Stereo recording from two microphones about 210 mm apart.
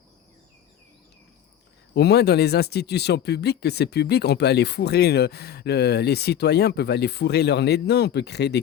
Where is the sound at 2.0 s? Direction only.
50° left (ahead or behind).